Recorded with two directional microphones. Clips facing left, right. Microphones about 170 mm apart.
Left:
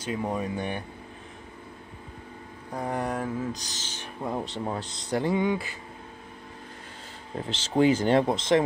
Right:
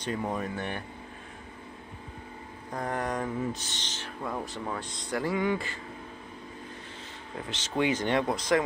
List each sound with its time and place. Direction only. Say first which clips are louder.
0.0 s speech: left 2 dB; 10° left (ahead or behind)
2.7 s speech: left 2 dB; 10° left (ahead or behind)
3.5 s speech: even; centre (ahead or behind)
3.9 s speech: left 4 dB; 20° left (ahead or behind)
7.3 s speech: left 6 dB; 30° left (ahead or behind)